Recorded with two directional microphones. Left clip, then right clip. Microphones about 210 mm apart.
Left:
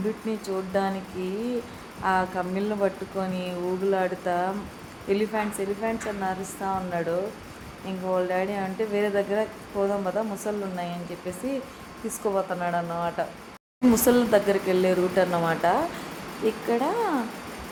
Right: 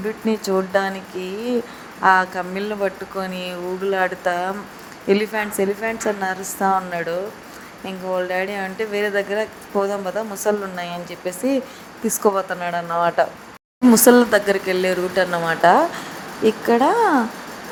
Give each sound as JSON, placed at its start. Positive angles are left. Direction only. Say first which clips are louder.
{"t": 0.3, "sound": "speech", "louder": "right 9 dB", "side_deg": -30}